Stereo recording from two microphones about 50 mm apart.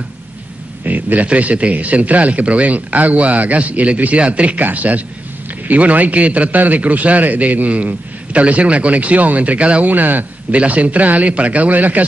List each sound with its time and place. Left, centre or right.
0.8 s a man's voice: right
9.8 s a man's voice: right
10.5 s a man's voice: right